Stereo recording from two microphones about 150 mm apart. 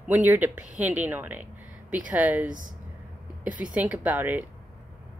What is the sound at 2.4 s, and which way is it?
Speech, 65° right (ahead or behind).